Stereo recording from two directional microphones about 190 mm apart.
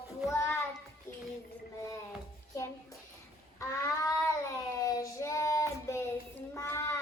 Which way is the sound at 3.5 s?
20° left (ahead or behind).